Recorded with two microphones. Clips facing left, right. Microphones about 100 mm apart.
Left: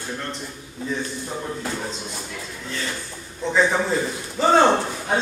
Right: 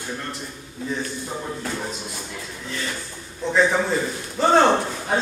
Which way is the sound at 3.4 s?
Centre (ahead or behind).